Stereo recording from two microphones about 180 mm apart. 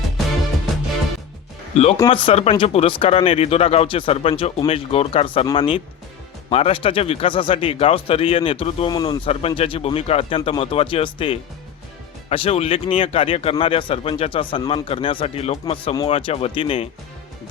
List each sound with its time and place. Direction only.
1.7 s speech: 35° left (ahead or behind)